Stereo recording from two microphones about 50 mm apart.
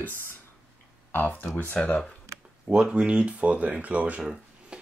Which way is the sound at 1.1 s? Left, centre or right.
Left.